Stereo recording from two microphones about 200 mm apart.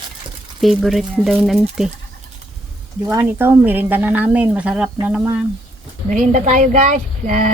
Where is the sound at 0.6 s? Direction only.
Centre (ahead or behind).